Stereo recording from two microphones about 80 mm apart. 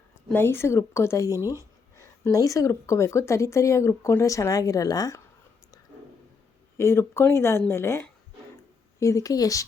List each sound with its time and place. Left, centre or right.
0.3 s a woman's voice: left
6.7 s a woman's voice: left
9.0 s speech: left